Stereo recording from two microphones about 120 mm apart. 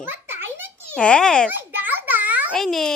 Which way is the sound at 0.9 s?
10° left (ahead or behind).